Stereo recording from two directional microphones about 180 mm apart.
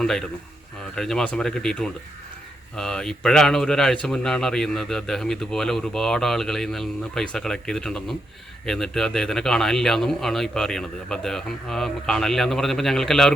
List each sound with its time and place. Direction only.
0.0 s a man's voice: 5° left (ahead or behind)